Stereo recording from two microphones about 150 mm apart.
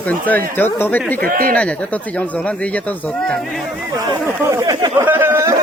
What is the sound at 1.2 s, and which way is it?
Speech, 75° right (ahead or behind).